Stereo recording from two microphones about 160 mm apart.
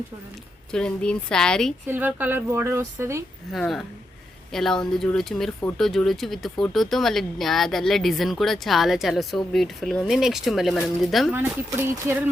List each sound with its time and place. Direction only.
0.7 s speech: 5° left (ahead or behind)
1.9 s a woman's voice: 10° right (ahead or behind)
3.5 s speech: centre (ahead or behind)
11.3 s a woman's voice: 15° right (ahead or behind)